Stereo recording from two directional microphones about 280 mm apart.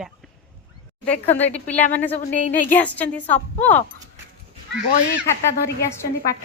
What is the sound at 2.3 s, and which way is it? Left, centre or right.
Speech, left.